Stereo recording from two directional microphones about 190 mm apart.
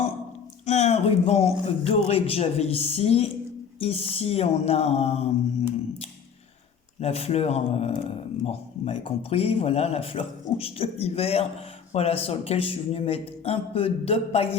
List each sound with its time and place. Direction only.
0.6 s speech: 35° left (ahead or behind)
7.0 s speech: 35° left (ahead or behind)